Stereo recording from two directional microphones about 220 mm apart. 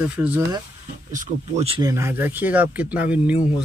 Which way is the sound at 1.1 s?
35° right (ahead or behind).